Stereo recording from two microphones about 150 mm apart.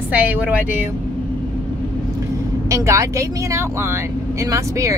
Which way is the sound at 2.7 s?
20° right (ahead or behind).